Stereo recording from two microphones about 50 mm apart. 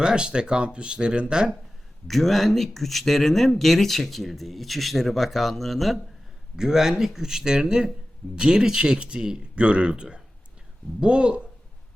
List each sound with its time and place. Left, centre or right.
0.0 s speech: centre
2.0 s speech: centre
6.6 s speech: centre